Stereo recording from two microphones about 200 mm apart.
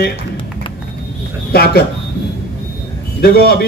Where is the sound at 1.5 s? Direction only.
50° left (ahead or behind).